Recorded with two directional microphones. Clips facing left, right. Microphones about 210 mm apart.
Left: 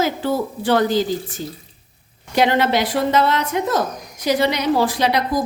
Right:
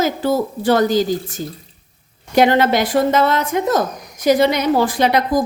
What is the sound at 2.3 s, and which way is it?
A woman's voice, 45° right (ahead or behind).